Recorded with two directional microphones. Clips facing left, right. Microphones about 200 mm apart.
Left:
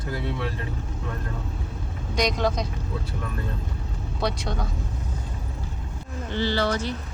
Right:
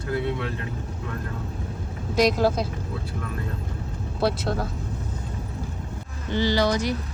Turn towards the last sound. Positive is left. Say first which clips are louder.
# right 3 dB
turn(degrees=-15)  # may be behind; listen again after turning